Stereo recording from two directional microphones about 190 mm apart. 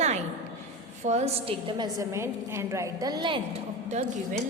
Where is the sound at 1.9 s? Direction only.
15° right (ahead or behind).